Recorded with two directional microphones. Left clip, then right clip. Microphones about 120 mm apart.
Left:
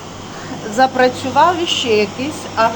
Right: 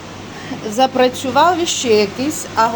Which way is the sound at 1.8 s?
75° right (ahead or behind).